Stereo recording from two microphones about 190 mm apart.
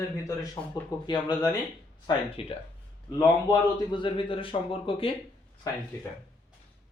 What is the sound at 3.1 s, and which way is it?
A man's voice, 20° left (ahead or behind).